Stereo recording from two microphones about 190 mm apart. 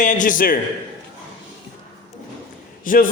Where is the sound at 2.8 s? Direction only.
45° left (ahead or behind).